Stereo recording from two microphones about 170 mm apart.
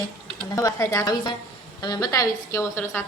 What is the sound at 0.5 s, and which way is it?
A woman's voice, 20° left (ahead or behind).